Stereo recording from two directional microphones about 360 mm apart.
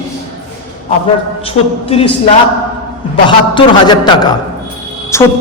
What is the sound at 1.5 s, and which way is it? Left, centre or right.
Speech, centre.